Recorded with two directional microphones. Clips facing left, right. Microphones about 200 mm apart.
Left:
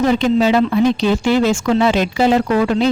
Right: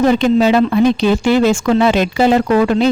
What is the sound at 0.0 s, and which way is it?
Speech, 55° right (ahead or behind).